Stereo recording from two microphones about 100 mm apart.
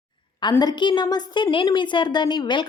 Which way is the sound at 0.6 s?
45° left (ahead or behind).